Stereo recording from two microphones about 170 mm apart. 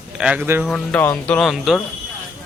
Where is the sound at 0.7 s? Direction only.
5° left (ahead or behind).